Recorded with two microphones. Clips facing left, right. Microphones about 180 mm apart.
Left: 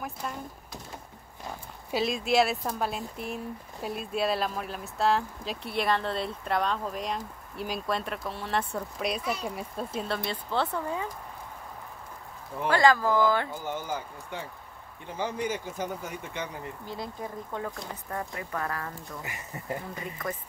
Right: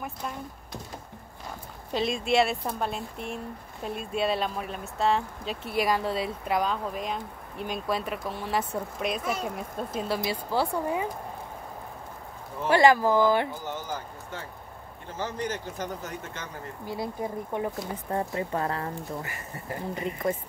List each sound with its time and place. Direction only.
0.0 s speech: centre (ahead or behind)
1.9 s speech: 5° left (ahead or behind)
9.2 s speech: 50° right (ahead or behind)
9.6 s speech: centre (ahead or behind)
12.6 s speech: 20° right (ahead or behind)
13.8 s speech: 10° left (ahead or behind)
16.8 s speech: 10° right (ahead or behind)
19.2 s speech: 20° left (ahead or behind)
19.9 s speech: 25° right (ahead or behind)